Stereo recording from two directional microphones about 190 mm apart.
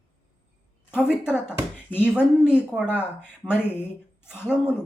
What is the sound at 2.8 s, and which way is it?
Speech, 10° left (ahead or behind).